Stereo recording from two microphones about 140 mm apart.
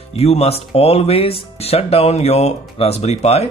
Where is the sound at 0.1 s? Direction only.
45° left (ahead or behind).